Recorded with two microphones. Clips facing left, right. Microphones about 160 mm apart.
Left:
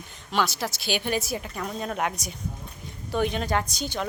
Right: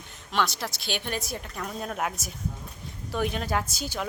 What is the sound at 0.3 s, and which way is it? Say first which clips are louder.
Speech: left 2 dB; centre (ahead or behind).